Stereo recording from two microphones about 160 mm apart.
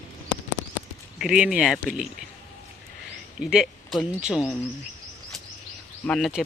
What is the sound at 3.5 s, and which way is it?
Speech, 5° right (ahead or behind).